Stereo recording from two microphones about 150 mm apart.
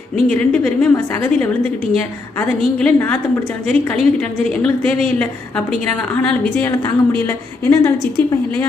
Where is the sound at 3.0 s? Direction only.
15° left (ahead or behind).